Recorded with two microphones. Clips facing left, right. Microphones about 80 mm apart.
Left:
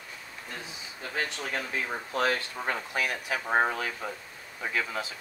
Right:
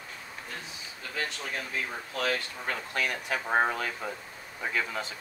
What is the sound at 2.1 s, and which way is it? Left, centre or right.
Speech, left.